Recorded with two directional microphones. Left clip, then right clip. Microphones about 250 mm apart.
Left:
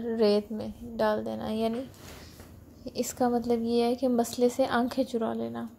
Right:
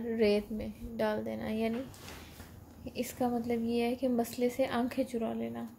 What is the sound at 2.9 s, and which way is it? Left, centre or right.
A woman's voice, centre.